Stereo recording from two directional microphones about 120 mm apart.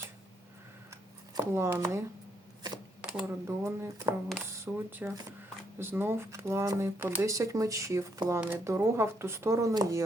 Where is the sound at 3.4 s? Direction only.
25° right (ahead or behind).